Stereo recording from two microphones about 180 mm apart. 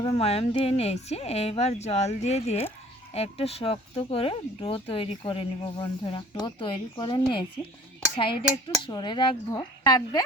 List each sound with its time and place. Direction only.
0.0 s speech: 35° left (ahead or behind)